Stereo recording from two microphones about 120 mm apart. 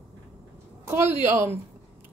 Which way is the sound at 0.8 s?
20° right (ahead or behind).